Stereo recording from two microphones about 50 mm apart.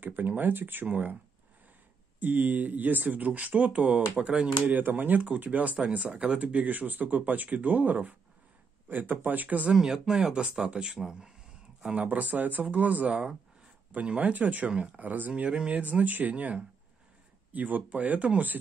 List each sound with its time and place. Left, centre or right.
0.0 s speech: right
0.8 s speech: right
2.1 s speech: right
4.7 s speech: right
5.8 s speech: right
9.7 s speech: centre
11.9 s speech: right
13.0 s speech: centre